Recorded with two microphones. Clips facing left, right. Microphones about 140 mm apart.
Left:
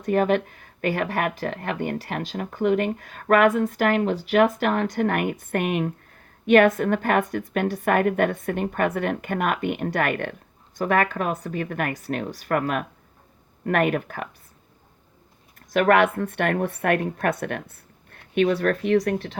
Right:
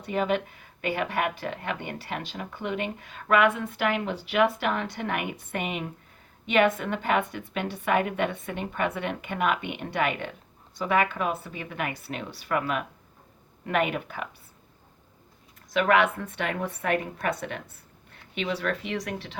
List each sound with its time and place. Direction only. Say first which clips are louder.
0.0 s speech: left 6 dB; 50° left (ahead or behind)
15.7 s a woman's voice: left 4 dB; 50° left (ahead or behind)